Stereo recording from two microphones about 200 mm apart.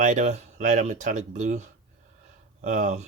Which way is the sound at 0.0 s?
40° right (ahead or behind).